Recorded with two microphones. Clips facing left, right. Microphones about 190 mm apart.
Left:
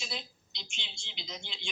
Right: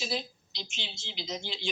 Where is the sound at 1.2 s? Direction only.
45° right (ahead or behind).